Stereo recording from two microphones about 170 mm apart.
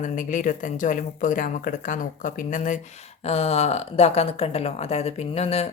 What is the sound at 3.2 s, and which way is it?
A woman's voice, 35° left (ahead or behind).